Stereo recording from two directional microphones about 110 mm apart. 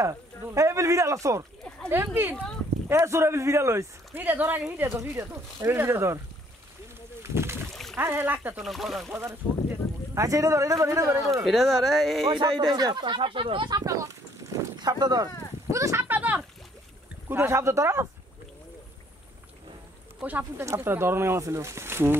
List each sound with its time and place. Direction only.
0.0 s speech: 30° right (ahead or behind)
7.2 s rowboat: 25° right (ahead or behind)
7.7 s rowboat: centre (ahead or behind)
8.0 s speech: 20° right (ahead or behind)
8.6 s speech: centre (ahead or behind)
9.1 s a man's voice: 20° right (ahead or behind)
11.4 s speech: centre (ahead or behind)
12.3 s speech: 40° right (ahead or behind)
13.7 s a sound: 35° right (ahead or behind)
15.7 s speech: 25° right (ahead or behind)
16.1 s a sound: 15° right (ahead or behind)
17.3 s speech: 20° right (ahead or behind)
20.2 s speech: 15° right (ahead or behind)